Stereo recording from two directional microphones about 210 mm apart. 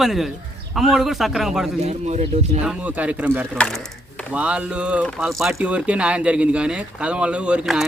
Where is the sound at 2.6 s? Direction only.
5° right (ahead or behind).